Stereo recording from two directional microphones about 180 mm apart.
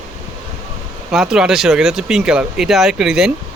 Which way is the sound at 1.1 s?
5° right (ahead or behind).